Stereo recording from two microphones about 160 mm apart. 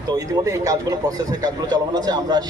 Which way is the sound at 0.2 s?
20° right (ahead or behind).